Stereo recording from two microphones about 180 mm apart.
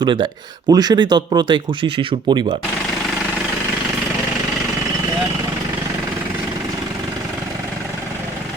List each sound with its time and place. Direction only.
0.0 s speech: 25° right (ahead or behind)